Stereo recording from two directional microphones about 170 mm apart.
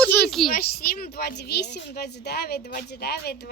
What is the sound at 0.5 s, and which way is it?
Speech, 60° left (ahead or behind).